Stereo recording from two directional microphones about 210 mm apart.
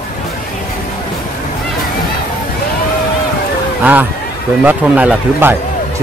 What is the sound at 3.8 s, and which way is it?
A man's voice, 10° right (ahead or behind).